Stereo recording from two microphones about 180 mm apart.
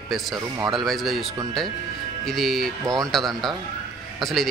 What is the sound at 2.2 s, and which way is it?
Speech, centre (ahead or behind).